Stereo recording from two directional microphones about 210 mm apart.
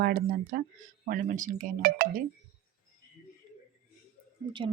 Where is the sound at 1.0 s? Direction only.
40° right (ahead or behind).